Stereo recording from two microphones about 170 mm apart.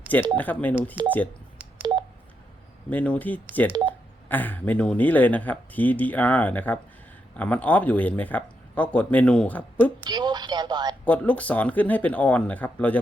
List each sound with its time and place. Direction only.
0.3 s speech: 10° left (ahead or behind)
1.8 s telephone dialing: 30° right (ahead or behind)
2.9 s speech: 10° left (ahead or behind)
10.0 s a sound: 25° right (ahead or behind)
11.0 s speech: 10° left (ahead or behind)